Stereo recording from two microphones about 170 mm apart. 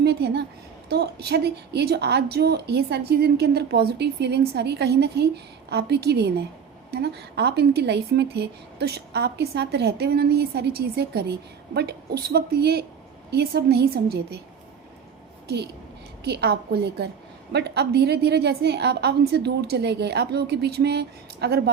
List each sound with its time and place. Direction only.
0.0 s a woman's voice: 75° right (ahead or behind)
15.4 s a woman's voice: 75° right (ahead or behind)